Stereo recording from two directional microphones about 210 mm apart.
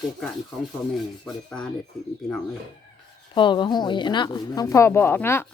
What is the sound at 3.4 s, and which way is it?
Speech, 20° left (ahead or behind).